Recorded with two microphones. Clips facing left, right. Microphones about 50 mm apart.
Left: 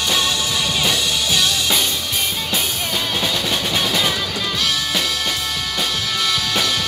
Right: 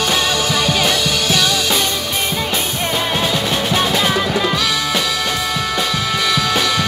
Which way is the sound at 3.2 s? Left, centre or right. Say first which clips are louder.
Right 3 dB; right.